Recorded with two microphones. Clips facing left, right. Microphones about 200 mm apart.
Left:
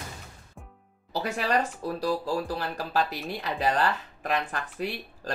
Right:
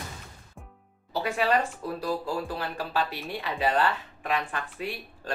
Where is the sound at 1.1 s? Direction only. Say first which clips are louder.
Right 1 dB; 35° left (ahead or behind).